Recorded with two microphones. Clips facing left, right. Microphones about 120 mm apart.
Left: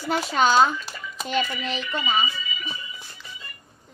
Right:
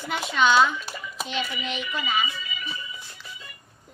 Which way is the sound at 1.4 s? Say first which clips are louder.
Left 2 dB; centre (ahead or behind).